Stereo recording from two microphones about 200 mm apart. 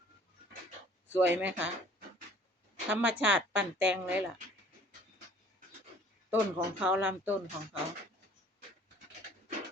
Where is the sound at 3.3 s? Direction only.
70° right (ahead or behind).